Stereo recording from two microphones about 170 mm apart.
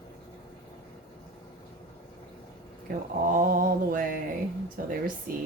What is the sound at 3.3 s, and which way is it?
Mantra, 55° right (ahead or behind).